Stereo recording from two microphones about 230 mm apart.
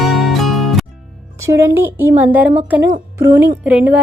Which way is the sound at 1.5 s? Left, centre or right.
Centre.